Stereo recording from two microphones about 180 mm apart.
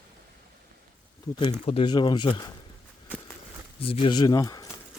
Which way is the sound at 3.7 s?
30° left (ahead or behind).